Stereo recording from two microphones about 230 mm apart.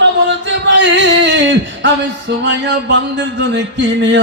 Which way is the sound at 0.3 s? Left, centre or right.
Right.